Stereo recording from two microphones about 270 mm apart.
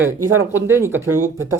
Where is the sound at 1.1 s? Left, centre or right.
Right.